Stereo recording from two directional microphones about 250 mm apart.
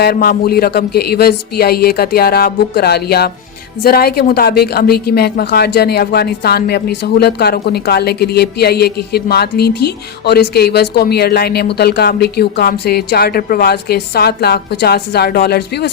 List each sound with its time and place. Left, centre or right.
0.0 s speech: left